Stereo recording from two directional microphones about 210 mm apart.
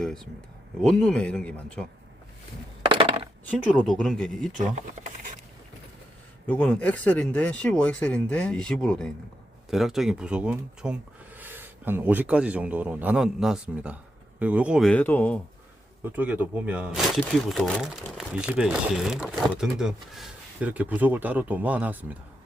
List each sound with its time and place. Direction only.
0.0 s speech: centre (ahead or behind)
2.9 s a sound: 25° right (ahead or behind)
3.5 s speech: 5° left (ahead or behind)
6.5 s speech: 10° left (ahead or behind)
16.1 s speech: 10° right (ahead or behind)